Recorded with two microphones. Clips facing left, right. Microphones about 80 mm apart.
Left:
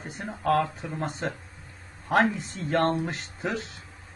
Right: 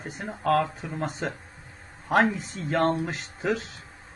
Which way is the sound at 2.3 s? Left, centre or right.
Centre.